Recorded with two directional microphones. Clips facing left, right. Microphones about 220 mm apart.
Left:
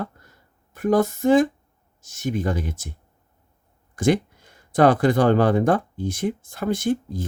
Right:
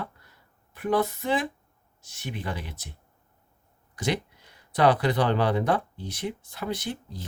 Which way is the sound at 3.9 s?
50° left (ahead or behind).